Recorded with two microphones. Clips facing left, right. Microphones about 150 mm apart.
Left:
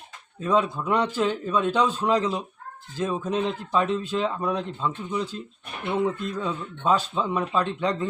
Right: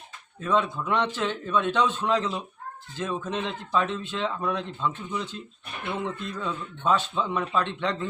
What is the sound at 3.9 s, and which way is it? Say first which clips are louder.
Speech: left 5 dB; 40° left (ahead or behind).